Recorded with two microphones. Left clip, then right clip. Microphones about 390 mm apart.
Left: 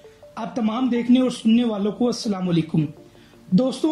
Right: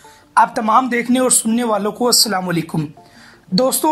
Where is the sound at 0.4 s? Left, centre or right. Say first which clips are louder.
Right 13 dB; right.